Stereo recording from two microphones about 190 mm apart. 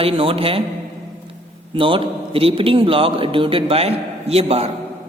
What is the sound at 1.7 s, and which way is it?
A man's voice, 25° right (ahead or behind).